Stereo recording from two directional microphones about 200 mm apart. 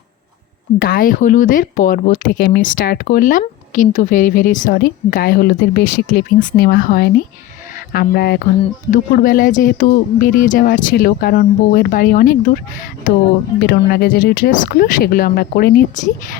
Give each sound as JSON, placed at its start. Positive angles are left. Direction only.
{"t": 0.8, "sound": "speech", "side_deg": 45}
{"t": 13.6, "sound": "speech", "side_deg": 50}